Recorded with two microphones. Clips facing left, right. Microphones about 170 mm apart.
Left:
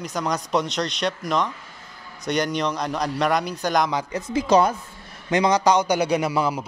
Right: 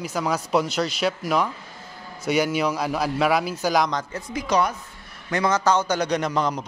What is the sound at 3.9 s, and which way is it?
Speech, 10° left (ahead or behind).